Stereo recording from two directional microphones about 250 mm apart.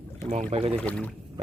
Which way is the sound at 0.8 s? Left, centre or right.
Centre.